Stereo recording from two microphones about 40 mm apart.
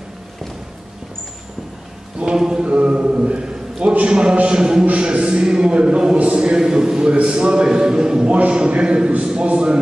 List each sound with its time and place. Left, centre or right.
2.1 s a man's voice: centre